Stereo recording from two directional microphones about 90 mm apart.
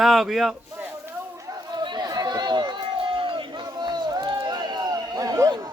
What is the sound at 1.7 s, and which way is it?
Run, 55° right (ahead or behind).